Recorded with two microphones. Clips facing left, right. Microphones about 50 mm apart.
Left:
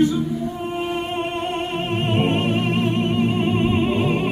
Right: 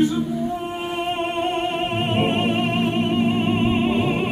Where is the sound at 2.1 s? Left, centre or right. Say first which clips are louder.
Even; centre.